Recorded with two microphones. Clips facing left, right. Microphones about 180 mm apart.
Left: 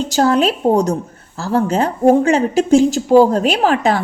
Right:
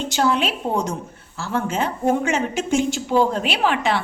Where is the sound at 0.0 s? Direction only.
40° left (ahead or behind).